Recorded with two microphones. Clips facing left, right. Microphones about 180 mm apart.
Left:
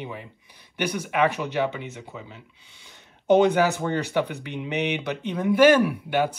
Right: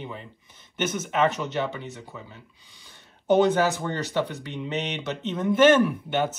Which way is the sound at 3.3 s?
15° left (ahead or behind).